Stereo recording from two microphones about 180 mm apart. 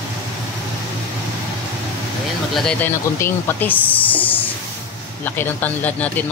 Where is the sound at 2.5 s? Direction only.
5° left (ahead or behind).